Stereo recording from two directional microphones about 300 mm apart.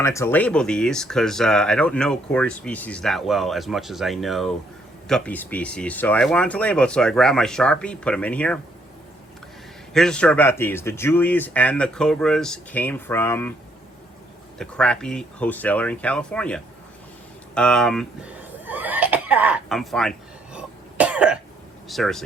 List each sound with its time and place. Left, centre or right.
0.0 s speech: centre
9.9 s speech: centre
14.6 s speech: centre
18.6 s cough: centre
21.8 s speech: centre